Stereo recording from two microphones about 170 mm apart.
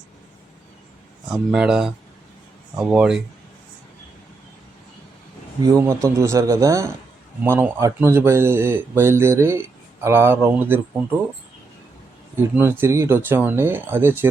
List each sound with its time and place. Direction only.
1.3 s speech: 5° right (ahead or behind)
5.6 s speech: 15° right (ahead or behind)
12.4 s speech: 10° right (ahead or behind)